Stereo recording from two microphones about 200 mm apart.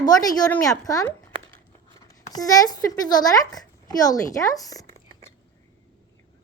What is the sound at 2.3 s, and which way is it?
Speech, 20° left (ahead or behind).